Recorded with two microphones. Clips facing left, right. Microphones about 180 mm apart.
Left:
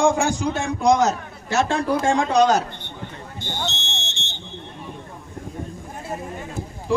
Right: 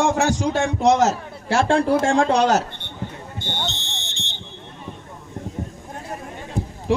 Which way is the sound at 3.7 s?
20° left (ahead or behind).